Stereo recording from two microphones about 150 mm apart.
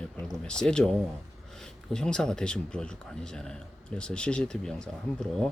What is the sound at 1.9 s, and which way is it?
Speech, 5° left (ahead or behind).